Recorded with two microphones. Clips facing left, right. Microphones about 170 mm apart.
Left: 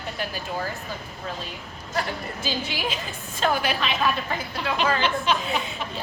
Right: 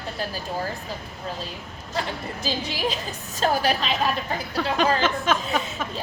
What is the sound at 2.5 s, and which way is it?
A woman's voice, 35° right (ahead or behind).